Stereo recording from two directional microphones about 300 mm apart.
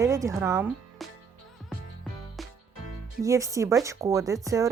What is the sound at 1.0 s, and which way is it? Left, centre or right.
Music, centre.